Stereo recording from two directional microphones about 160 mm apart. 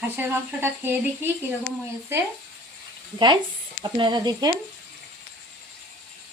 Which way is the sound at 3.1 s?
30° right (ahead or behind).